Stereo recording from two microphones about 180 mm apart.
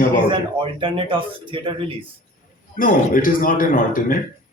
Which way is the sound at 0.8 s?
30° right (ahead or behind).